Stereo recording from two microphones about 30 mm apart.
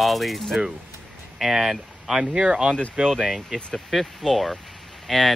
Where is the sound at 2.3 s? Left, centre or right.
Right.